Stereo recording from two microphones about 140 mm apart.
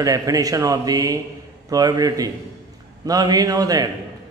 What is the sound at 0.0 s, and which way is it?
Speech, 25° right (ahead or behind).